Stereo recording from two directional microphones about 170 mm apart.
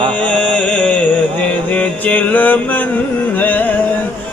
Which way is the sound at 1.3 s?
10° left (ahead or behind).